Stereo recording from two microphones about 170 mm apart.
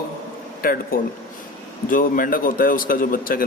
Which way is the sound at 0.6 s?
60° left (ahead or behind).